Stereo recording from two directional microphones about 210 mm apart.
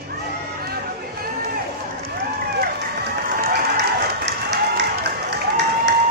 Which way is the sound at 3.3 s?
50° right (ahead or behind).